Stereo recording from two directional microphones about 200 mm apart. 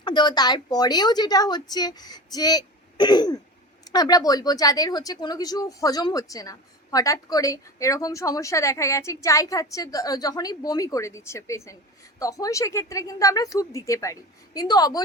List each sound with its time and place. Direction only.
0.0 s a woman's voice: 20° left (ahead or behind)